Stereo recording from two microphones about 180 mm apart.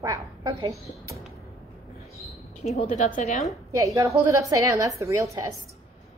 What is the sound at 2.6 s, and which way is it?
Speech, 35° left (ahead or behind).